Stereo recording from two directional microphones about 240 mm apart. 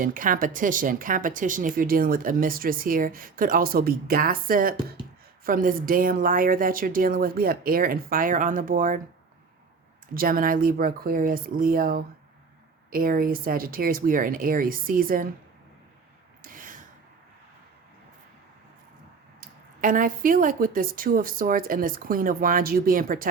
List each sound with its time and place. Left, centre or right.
0.0 s speech: right
10.2 s speech: right
16.4 s gasp: right
19.4 s speech: right